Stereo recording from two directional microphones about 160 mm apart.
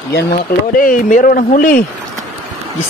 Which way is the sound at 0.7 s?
60° left (ahead or behind).